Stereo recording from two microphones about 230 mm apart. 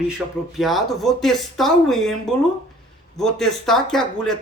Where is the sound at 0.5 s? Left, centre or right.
Centre.